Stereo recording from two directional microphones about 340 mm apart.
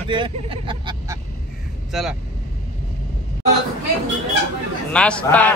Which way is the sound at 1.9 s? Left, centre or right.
Centre.